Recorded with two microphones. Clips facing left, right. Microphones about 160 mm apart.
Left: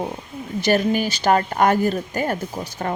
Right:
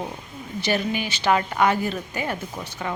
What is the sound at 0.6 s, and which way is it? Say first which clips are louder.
A woman's voice: left 6 dB; 45° left (ahead or behind).